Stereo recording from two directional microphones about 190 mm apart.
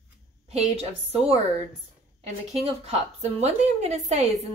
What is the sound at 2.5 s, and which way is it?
A woman's voice, 35° right (ahead or behind).